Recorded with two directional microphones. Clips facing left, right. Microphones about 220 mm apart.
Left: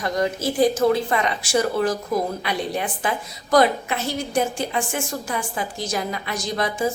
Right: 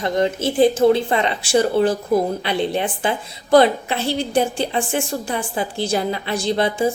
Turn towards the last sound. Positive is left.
turn(degrees=-30)  # may be behind; listen again after turning